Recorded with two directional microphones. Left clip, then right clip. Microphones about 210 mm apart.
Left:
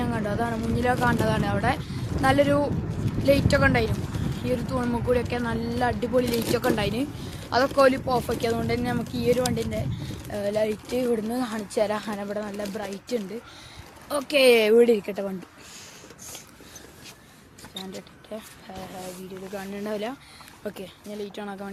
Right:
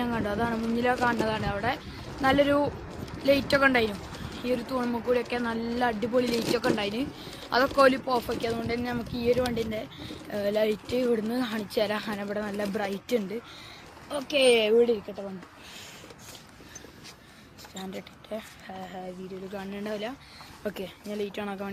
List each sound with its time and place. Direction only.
0.0 s speech: centre (ahead or behind)
12.5 s speech: 15° right (ahead or behind)
14.1 s speech: 25° left (ahead or behind)
15.0 s speech: 40° left (ahead or behind)
18.3 s speech: 5° left (ahead or behind)
19.5 s speech: 5° left (ahead or behind)
19.9 s speech: 25° left (ahead or behind)
20.7 s speech: 10° right (ahead or behind)